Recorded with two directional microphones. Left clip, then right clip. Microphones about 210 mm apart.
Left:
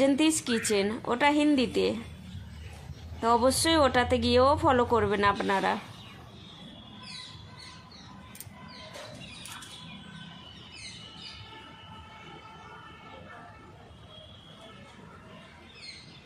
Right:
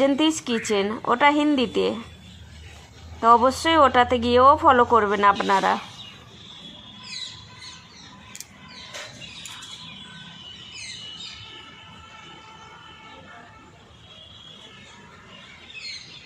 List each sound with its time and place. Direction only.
0.0 s speech: 10° right (ahead or behind)
3.2 s speech: 10° right (ahead or behind)